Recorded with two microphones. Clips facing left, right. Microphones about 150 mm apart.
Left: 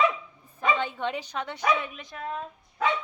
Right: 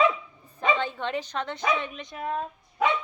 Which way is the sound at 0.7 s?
10° left (ahead or behind).